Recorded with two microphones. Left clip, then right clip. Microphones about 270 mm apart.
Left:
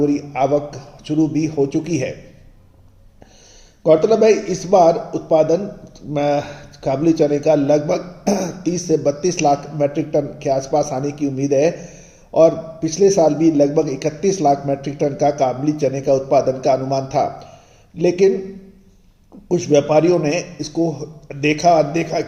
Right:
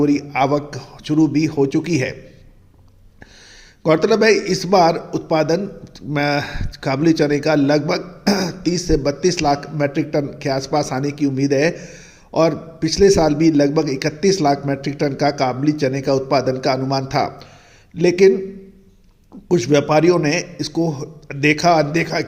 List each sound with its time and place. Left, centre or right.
0.0 s a man's voice: right
3.8 s a man's voice: right
19.5 s a man's voice: right